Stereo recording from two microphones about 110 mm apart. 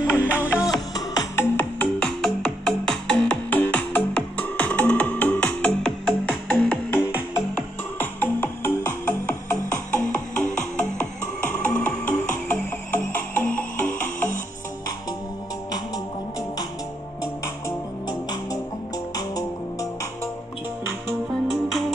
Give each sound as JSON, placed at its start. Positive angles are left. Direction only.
{"t": 0.1, "sound": "music", "side_deg": -15}
{"t": 0.7, "sound": "music", "side_deg": 35}
{"t": 1.4, "sound": "music", "side_deg": 20}
{"t": 2.0, "sound": "music", "side_deg": 5}
{"t": 10.8, "sound": "music", "side_deg": 15}
{"t": 17.6, "sound": "music", "side_deg": 35}
{"t": 21.1, "sound": "music", "side_deg": 0}